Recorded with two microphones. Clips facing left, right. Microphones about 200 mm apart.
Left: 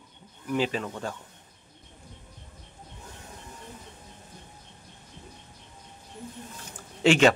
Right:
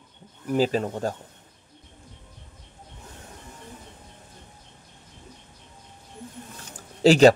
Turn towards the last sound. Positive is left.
turn(degrees=-35)  # may be behind; listen again after turning